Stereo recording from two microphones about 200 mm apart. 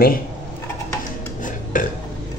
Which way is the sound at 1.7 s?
40° left (ahead or behind).